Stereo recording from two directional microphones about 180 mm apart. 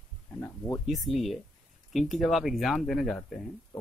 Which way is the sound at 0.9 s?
Centre (ahead or behind).